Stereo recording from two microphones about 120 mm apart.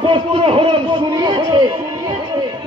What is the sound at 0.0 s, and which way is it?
Speech, 45° right (ahead or behind).